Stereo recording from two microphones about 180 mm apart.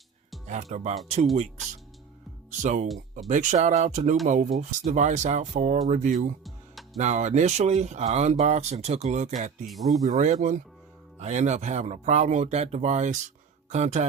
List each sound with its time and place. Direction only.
0.4 s speech: 40° right (ahead or behind)
2.6 s speech: 40° right (ahead or behind)
2.8 s speech: centre (ahead or behind)
3.2 s speech: 45° right (ahead or behind)
9.6 s speech: centre (ahead or behind)
10.0 s speech: 45° right (ahead or behind)